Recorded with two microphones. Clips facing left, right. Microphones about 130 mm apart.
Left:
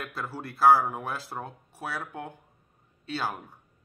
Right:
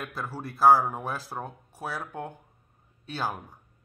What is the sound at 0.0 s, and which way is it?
Speech, 15° right (ahead or behind).